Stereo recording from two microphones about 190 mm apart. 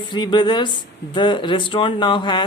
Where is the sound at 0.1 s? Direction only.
25° left (ahead or behind).